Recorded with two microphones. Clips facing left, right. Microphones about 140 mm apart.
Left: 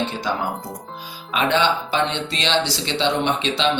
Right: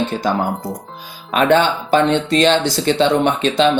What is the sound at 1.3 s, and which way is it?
Speech, 50° right (ahead or behind).